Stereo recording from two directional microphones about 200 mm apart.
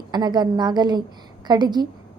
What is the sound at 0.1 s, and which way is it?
A woman's voice, 20° right (ahead or behind).